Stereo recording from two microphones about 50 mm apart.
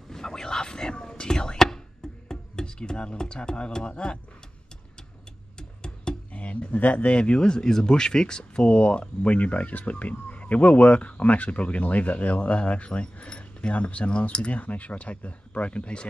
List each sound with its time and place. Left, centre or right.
0.1 s whispering: centre
2.2 s speech: centre
5.6 s a sound: centre
6.3 s speech: left